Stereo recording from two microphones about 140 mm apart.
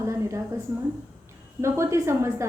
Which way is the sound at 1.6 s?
20° right (ahead or behind).